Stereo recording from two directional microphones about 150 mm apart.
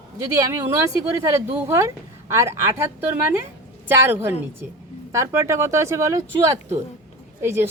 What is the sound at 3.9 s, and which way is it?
Speech, 15° right (ahead or behind).